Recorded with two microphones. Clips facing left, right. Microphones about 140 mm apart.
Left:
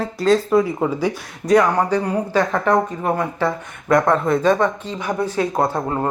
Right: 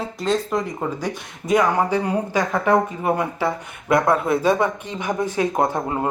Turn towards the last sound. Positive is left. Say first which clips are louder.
# left 1 dB
turn(degrees=-15)  # may be behind; listen again after turning